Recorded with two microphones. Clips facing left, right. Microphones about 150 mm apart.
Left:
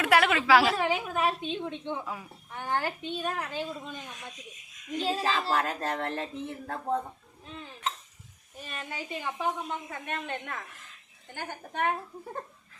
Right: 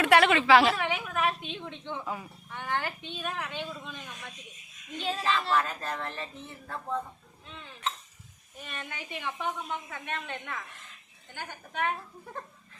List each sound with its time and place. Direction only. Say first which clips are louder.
0.0 s a woman's voice: right 2 dB; centre (ahead or behind)
0.8 s a woman's voice: left 2 dB; 30° left (ahead or behind)
1.8 s speech: left 3 dB; 10° left (ahead or behind)
2.0 s speech: right 2 dB; centre (ahead or behind)
2.5 s a woman's voice: left 2 dB; 35° left (ahead or behind)
4.9 s a woman's voice: left 1 dB; 35° left (ahead or behind)
5.5 s speech: left 1 dB; 70° left (ahead or behind)
8.6 s a woman's voice: left 2 dB; 30° left (ahead or behind)